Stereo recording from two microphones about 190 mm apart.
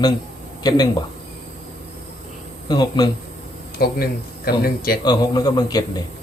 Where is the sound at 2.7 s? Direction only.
20° left (ahead or behind).